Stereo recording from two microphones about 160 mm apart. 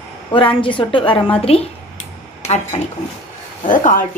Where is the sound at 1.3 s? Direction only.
40° left (ahead or behind).